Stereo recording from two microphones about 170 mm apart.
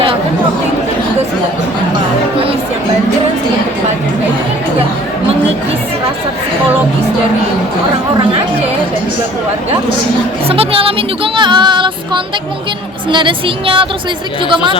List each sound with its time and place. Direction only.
8.1 s chatter: 30° right (ahead or behind)
10.5 s music: 35° right (ahead or behind)
13.1 s speech: 30° right (ahead or behind)